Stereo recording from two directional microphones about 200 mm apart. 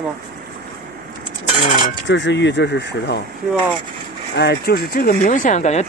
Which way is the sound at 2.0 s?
60° left (ahead or behind).